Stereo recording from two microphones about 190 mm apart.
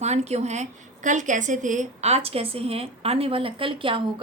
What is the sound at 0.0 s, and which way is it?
A woman's voice, 35° right (ahead or behind).